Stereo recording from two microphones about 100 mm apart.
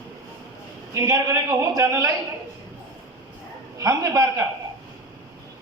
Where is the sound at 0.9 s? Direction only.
30° right (ahead or behind).